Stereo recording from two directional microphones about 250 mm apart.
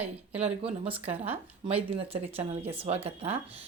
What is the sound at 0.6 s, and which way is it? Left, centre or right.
Speech, right.